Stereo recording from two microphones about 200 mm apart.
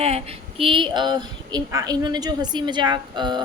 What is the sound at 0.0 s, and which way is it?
A woman's voice, 30° right (ahead or behind).